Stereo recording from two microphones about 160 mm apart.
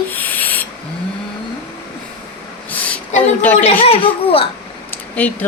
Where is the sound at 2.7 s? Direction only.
10° left (ahead or behind).